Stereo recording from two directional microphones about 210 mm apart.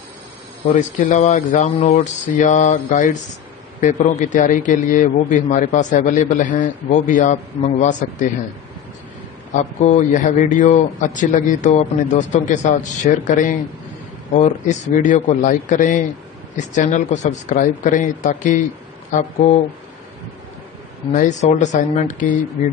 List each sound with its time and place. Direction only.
0.7 s a man's voice: 35° left (ahead or behind)
9.5 s a man's voice: 35° left (ahead or behind)
21.1 s a man's voice: 35° left (ahead or behind)